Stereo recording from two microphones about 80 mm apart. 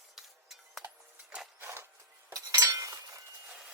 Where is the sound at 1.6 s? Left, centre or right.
Right.